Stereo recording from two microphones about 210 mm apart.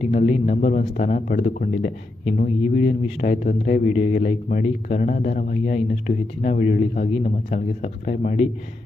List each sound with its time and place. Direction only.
0.0 s speech: 35° left (ahead or behind)